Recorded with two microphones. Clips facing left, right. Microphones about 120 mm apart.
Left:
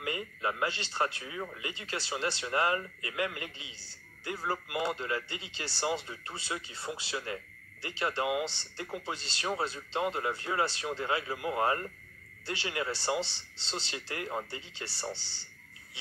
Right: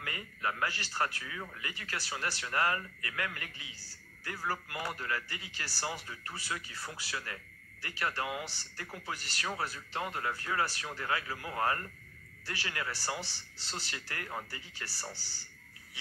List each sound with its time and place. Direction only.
0.0 s speech: 20° left (ahead or behind)